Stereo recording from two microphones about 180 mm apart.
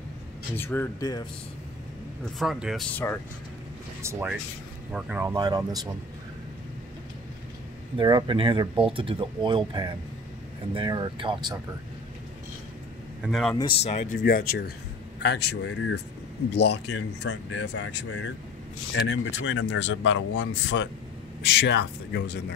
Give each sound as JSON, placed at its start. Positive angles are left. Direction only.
{"t": 0.6, "sound": "speech", "side_deg": 10}
{"t": 2.3, "sound": "speech", "side_deg": 0}
{"t": 4.0, "sound": "speech", "side_deg": -15}
{"t": 5.3, "sound": "speech", "side_deg": -20}
{"t": 8.0, "sound": "speech", "side_deg": -25}
{"t": 13.2, "sound": "speech", "side_deg": 0}
{"t": 13.6, "sound": "speech", "side_deg": 30}
{"t": 14.2, "sound": "speech", "side_deg": 55}
{"t": 15.1, "sound": "speech", "side_deg": 70}
{"t": 16.5, "sound": "speech", "side_deg": 75}
{"t": 21.4, "sound": "speech", "side_deg": 75}